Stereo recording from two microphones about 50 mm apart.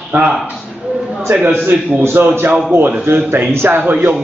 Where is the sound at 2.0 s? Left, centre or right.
Right.